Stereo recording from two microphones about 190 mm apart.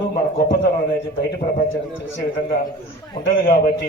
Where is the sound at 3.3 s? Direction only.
50° left (ahead or behind).